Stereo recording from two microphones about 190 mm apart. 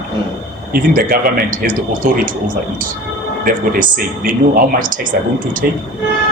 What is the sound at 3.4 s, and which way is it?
Speech, 50° right (ahead or behind).